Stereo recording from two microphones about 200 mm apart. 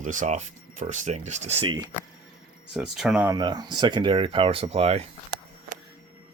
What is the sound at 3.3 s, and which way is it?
Speech, 20° right (ahead or behind).